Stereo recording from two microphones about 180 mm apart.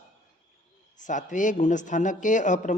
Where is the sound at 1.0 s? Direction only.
45° left (ahead or behind).